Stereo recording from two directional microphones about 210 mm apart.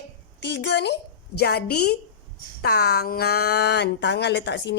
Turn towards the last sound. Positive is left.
turn(degrees=55)  # may be behind; listen again after turning